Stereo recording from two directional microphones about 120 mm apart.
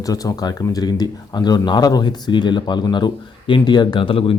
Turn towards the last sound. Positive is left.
turn(degrees=50)  # may be behind; listen again after turning